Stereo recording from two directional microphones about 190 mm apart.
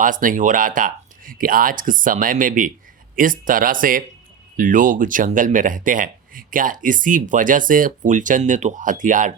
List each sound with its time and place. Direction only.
0.0 s speech: 45° right (ahead or behind)